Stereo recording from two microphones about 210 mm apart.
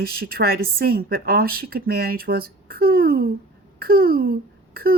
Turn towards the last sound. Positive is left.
turn(degrees=-45)  # may be behind; listen again after turning